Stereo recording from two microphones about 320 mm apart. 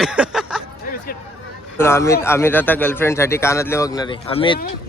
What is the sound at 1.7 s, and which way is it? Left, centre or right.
A man's voice, centre.